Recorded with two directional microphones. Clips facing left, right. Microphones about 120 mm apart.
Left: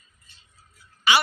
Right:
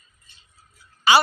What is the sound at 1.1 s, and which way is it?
Speech, 35° right (ahead or behind).